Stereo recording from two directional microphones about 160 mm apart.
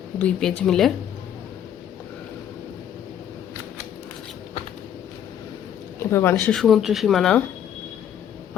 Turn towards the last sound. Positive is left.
turn(degrees=5)  # may be behind; listen again after turning